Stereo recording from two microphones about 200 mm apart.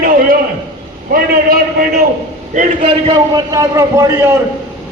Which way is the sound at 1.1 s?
45° right (ahead or behind).